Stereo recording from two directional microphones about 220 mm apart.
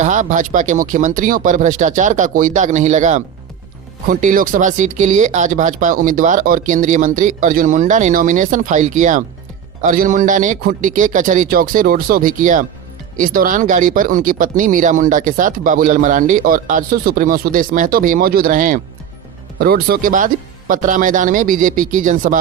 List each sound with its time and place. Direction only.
0.0 s speech: 35° right (ahead or behind)